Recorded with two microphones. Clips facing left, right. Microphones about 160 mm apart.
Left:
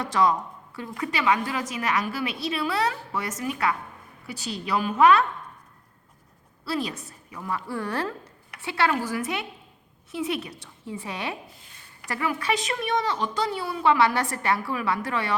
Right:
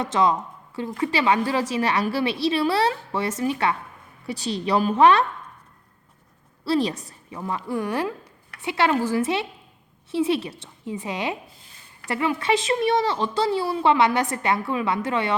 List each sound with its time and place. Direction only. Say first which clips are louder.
0.0 s a woman's voice: right 2 dB; 20° right (ahead or behind)
6.7 s speech: right 7 dB; 30° right (ahead or behind)